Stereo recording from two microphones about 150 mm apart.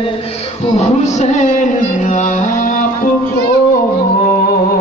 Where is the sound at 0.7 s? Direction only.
50° left (ahead or behind).